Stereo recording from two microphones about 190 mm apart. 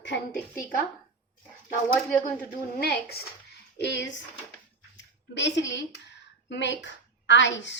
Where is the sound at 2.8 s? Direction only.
55° left (ahead or behind).